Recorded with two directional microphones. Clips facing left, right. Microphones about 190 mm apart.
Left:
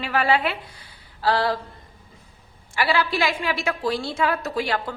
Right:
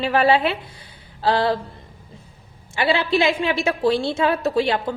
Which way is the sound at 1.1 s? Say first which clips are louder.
Right 3 dB; 25° right (ahead or behind).